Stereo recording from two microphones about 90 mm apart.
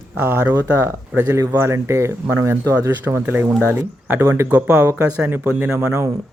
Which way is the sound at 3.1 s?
25° right (ahead or behind).